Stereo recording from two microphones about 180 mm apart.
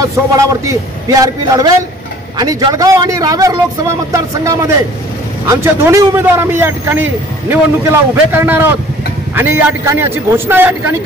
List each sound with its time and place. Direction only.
0.0 s a man's voice: 20° right (ahead or behind)